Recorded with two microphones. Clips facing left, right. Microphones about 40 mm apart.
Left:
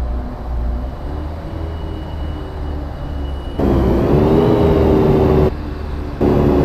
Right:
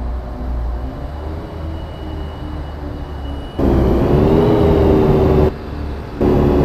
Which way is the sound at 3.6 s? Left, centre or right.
Centre.